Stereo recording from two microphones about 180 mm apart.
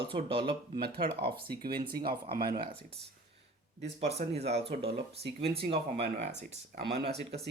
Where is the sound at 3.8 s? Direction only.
35° right (ahead or behind).